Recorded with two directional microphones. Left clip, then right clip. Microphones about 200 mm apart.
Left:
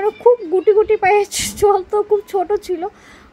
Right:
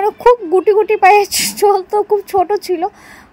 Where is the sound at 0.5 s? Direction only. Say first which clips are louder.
Right 2 dB; 20° right (ahead or behind).